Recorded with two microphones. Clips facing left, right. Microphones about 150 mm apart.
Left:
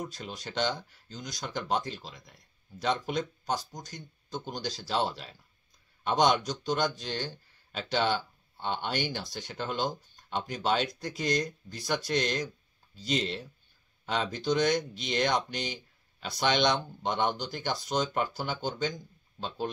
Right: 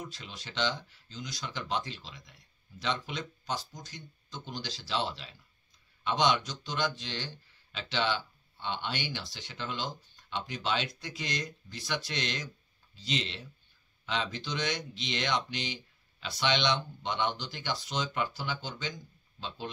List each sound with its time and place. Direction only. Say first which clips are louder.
0.0 s speech: left 5 dB; 45° left (ahead or behind)